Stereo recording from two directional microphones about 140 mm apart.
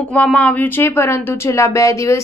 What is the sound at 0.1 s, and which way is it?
A woman's voice, 10° left (ahead or behind).